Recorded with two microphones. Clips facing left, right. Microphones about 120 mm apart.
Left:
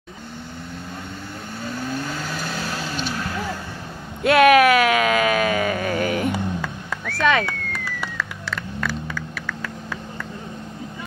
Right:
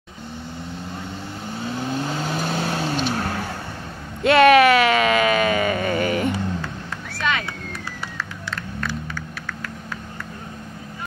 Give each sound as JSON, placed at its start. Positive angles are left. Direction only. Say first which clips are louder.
{"t": 1.8, "sound": "vehicle", "louder": "right 2 dB", "side_deg": -20}
{"t": 3.0, "sound": "vehicle", "louder": "right 4 dB", "side_deg": -40}
{"t": 4.2, "sound": "a sound", "louder": "right 1 dB", "side_deg": 5}
{"t": 7.1, "sound": "vehicle", "louder": "left 6 dB", "side_deg": 90}